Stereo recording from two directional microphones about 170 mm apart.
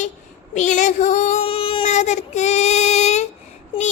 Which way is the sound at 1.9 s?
45° left (ahead or behind).